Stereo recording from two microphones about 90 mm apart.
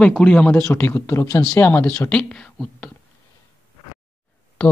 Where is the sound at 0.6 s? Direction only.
25° left (ahead or behind).